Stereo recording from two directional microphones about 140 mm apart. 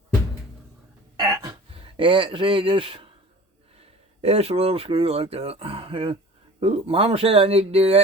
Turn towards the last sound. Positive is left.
turn(degrees=-45)  # may be behind; listen again after turning